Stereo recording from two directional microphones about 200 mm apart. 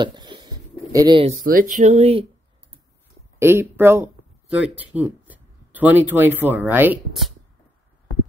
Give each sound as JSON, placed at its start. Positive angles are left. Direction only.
{"t": 0.0, "sound": "a sound", "side_deg": -20}
{"t": 1.4, "sound": "speech", "side_deg": -45}
{"t": 3.3, "sound": "speech", "side_deg": -10}